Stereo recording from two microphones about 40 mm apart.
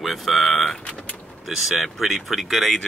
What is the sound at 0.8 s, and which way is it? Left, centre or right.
Vehicle, left.